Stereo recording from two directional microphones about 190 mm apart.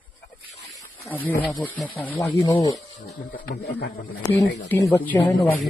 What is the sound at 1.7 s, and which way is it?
Speech, 5° left (ahead or behind).